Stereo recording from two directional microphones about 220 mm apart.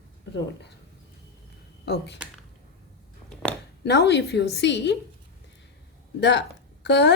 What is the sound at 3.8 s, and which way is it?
Speech, 50° left (ahead or behind).